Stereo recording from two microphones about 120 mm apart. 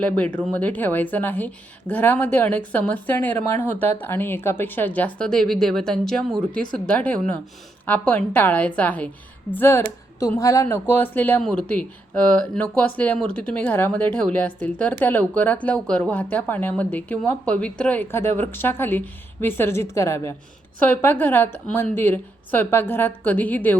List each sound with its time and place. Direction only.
0.0 s speech: 10° left (ahead or behind)